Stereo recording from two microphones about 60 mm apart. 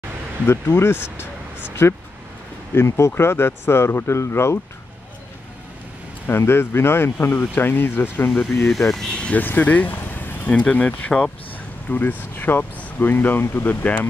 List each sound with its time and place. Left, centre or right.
0.5 s speech: left
6.2 s speech: left
8.6 s speech: centre
9.4 s speech: left